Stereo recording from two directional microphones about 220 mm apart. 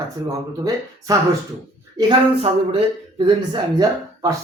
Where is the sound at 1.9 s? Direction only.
25° right (ahead or behind).